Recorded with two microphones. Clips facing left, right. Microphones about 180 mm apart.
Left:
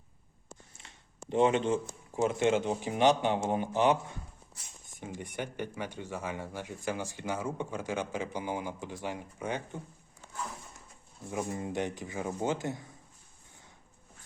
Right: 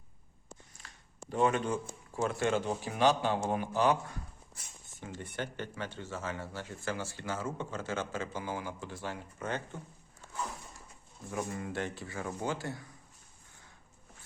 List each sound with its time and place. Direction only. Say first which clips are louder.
0.7 s speech: even; 25° left (ahead or behind)
11.3 s speech: left 2 dB; 20° left (ahead or behind)